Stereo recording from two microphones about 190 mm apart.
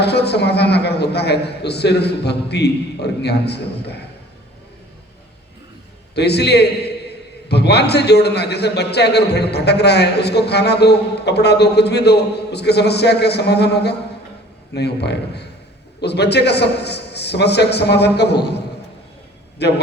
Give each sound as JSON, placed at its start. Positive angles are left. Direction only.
{"t": 0.0, "sound": "a man's voice", "side_deg": 60}
{"t": 6.1, "sound": "a man's voice", "side_deg": 60}
{"t": 19.6, "sound": "a man's voice", "side_deg": 60}